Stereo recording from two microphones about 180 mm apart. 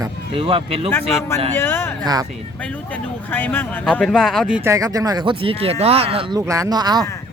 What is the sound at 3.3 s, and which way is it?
Speech, 10° left (ahead or behind).